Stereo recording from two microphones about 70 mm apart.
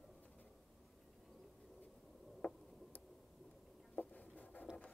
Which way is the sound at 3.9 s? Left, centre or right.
Left.